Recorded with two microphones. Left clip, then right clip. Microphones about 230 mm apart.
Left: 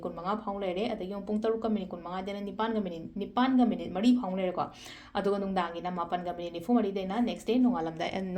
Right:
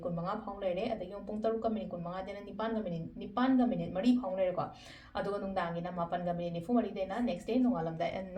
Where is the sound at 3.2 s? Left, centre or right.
Left.